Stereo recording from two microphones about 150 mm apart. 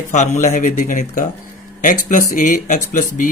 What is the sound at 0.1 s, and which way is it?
Speech, 55° left (ahead or behind).